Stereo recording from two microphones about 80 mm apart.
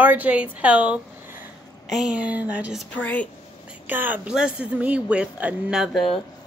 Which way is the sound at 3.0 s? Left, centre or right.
Centre.